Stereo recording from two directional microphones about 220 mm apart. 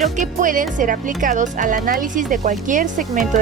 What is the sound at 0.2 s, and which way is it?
Speech, 35° right (ahead or behind).